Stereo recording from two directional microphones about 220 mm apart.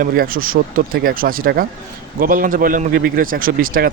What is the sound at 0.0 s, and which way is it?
A man's voice, 40° right (ahead or behind).